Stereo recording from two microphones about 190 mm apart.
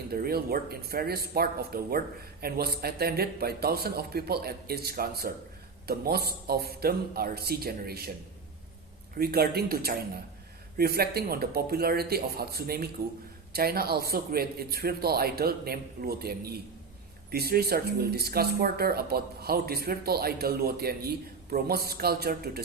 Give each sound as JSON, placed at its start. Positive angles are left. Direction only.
{"t": 0.1, "sound": "speech", "side_deg": -55}
{"t": 9.1, "sound": "speech", "side_deg": -55}